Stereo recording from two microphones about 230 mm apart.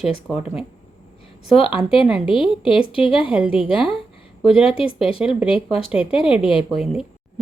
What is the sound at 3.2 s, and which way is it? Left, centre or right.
Speech, centre.